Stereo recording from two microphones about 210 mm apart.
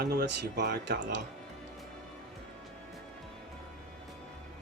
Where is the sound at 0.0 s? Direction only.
45° right (ahead or behind).